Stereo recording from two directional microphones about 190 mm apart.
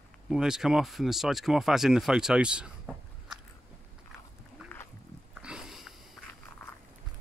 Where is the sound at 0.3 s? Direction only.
5° right (ahead or behind).